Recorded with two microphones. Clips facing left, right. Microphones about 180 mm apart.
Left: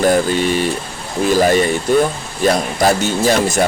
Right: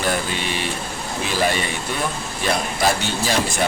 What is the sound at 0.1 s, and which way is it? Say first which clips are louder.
Speech: left 10 dB; 45° left (ahead or behind).